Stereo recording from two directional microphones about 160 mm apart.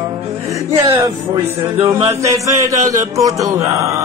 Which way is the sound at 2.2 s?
20° right (ahead or behind).